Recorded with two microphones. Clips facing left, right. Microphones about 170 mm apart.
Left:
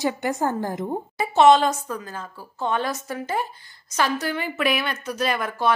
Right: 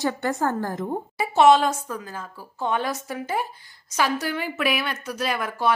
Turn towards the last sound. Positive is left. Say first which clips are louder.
# left 1 dB
turn(degrees=-10)  # may be behind; listen again after turning